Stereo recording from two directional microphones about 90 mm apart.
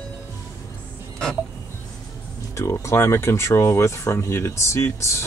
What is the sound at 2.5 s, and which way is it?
Speech, 35° left (ahead or behind).